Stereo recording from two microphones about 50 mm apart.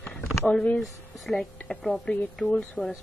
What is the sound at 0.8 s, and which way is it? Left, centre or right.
Speech, centre.